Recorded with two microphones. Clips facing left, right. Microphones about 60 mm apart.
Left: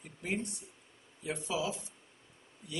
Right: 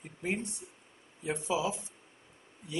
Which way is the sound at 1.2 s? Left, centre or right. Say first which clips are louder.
Right 3 dB; right.